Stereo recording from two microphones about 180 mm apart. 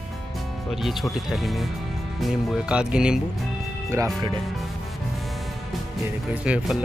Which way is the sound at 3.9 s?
20° right (ahead or behind).